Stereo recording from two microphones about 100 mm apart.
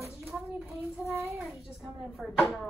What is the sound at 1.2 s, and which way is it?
Child singing, 25° right (ahead or behind).